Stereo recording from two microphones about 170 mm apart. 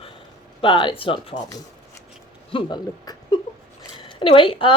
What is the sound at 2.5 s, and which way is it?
A woman's voice, 25° left (ahead or behind).